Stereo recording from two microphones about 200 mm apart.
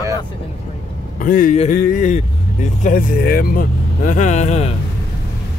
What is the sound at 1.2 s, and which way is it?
A man's voice, 45° left (ahead or behind).